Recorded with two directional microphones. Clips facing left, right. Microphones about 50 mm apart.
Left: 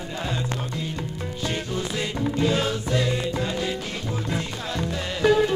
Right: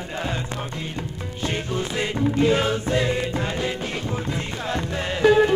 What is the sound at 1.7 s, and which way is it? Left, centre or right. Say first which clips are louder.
Music: right 2 dB; right.